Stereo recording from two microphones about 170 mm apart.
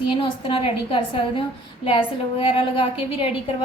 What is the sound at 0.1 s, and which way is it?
A woman's voice, 30° left (ahead or behind).